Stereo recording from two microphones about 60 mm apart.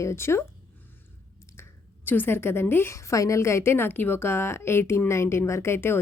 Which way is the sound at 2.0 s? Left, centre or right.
Left.